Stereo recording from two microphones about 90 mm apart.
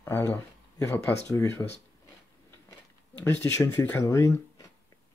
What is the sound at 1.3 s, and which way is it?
Speech, 35° left (ahead or behind).